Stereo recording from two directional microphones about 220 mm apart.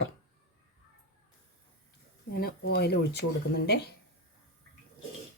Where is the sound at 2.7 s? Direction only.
45° left (ahead or behind).